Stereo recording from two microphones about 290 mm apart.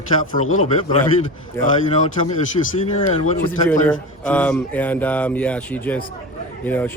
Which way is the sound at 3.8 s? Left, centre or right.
Centre.